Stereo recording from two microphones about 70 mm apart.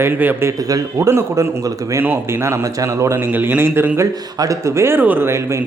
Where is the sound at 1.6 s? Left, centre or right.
Right.